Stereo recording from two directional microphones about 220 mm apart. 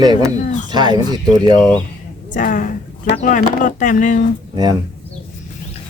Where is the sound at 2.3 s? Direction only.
40° left (ahead or behind).